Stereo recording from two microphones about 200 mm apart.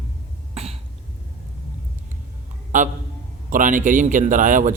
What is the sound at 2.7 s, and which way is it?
A man's voice, 40° right (ahead or behind).